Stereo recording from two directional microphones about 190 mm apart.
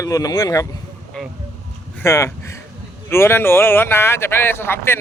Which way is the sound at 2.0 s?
15° left (ahead or behind).